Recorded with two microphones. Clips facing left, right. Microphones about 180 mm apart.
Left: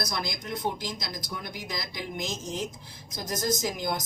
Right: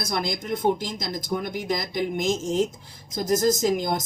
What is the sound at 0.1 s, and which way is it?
A woman's voice, 55° right (ahead or behind).